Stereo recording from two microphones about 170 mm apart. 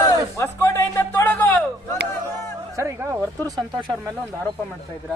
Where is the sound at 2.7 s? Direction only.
15° right (ahead or behind).